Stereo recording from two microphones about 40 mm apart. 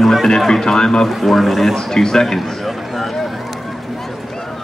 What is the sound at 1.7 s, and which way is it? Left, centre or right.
Speech, centre.